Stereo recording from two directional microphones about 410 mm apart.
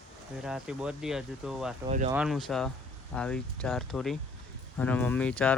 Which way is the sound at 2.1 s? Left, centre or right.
Centre.